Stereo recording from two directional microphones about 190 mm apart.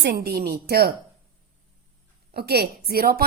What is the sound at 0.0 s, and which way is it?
Speech, 55° right (ahead or behind).